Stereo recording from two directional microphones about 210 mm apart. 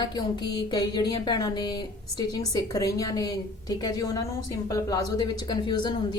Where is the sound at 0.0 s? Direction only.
20° left (ahead or behind).